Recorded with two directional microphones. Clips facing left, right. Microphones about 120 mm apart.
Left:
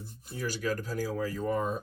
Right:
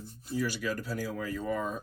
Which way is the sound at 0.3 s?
45° left (ahead or behind).